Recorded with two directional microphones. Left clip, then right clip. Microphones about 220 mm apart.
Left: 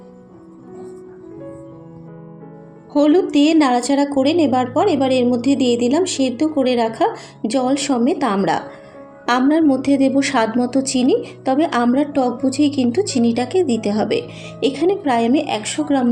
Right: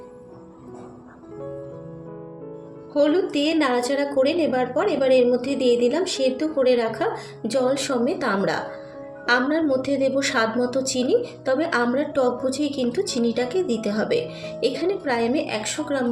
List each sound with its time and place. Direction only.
2.9 s a woman's voice: 20° left (ahead or behind)